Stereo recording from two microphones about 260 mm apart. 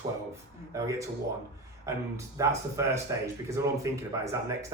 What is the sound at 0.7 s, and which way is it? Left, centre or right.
Speech, centre.